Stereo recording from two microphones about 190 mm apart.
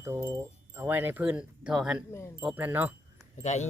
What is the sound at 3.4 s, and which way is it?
Speech, 35° left (ahead or behind).